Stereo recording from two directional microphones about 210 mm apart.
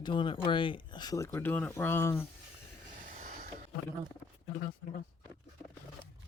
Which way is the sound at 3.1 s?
35° right (ahead or behind).